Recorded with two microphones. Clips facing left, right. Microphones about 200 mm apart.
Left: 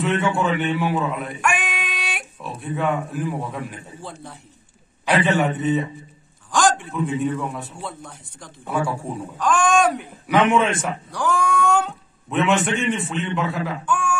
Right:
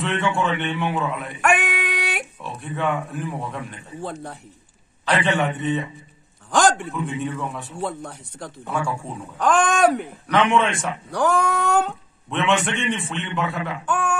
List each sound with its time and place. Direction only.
0.0 s a man's voice: centre (ahead or behind)
1.4 s female singing: 60° right (ahead or behind)
2.4 s a man's voice: centre (ahead or behind)
4.0 s speech: 60° right (ahead or behind)
5.0 s a man's voice: 5° left (ahead or behind)
6.9 s a man's voice: centre (ahead or behind)
7.8 s speech: 60° right (ahead or behind)
8.6 s speech: 5° left (ahead or behind)
9.4 s speech: 55° right (ahead or behind)
10.5 s a man's voice: centre (ahead or behind)
11.1 s speech: 60° right (ahead or behind)
12.3 s a man's voice: centre (ahead or behind)
13.8 s speech: 60° right (ahead or behind)